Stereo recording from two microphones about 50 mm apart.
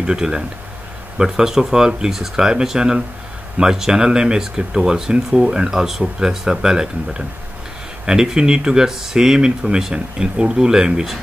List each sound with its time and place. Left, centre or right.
0.0 s speech: centre